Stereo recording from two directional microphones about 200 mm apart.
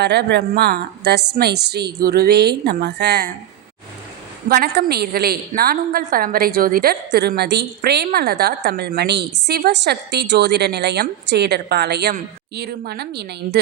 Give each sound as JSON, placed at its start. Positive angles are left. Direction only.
{"t": 0.0, "sound": "a woman's voice", "side_deg": -55}
{"t": 4.4, "sound": "a woman's voice", "side_deg": -50}